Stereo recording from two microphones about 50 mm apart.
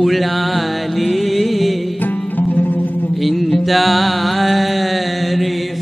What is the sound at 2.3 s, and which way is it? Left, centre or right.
Music, left.